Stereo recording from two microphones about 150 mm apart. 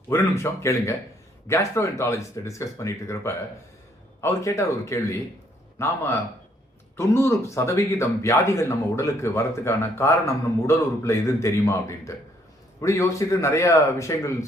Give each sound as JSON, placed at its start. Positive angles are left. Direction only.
{"t": 0.1, "sound": "a man's voice", "side_deg": 15}